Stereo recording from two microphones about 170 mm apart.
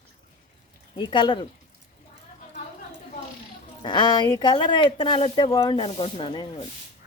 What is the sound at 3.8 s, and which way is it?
Speech, 25° left (ahead or behind).